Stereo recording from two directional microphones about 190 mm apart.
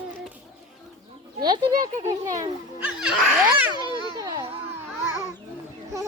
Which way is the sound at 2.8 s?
5° right (ahead or behind).